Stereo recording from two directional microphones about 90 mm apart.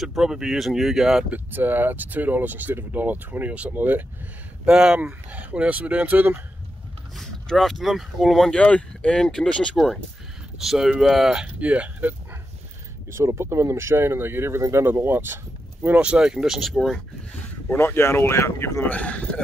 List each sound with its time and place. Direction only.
0.0 s speech: 5° right (ahead or behind)
1.3 s speech: 20° right (ahead or behind)
4.6 s speech: 10° right (ahead or behind)
7.2 s speech: centre (ahead or behind)
8.5 s speech: 10° left (ahead or behind)
11.4 s speech: 15° right (ahead or behind)
13.1 s speech: 30° right (ahead or behind)
16.0 s speech: 10° right (ahead or behind)
17.6 s speech: 25° left (ahead or behind)
18.9 s speech: 15° left (ahead or behind)